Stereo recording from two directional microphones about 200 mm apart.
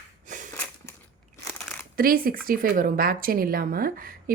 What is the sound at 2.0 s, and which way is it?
Speech, 45° right (ahead or behind).